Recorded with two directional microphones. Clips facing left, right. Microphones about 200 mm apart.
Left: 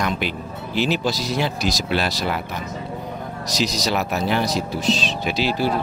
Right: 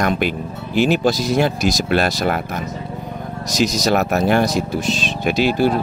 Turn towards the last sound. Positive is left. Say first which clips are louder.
# right 5 dB
turn(degrees=-50)  # may be behind; listen again after turning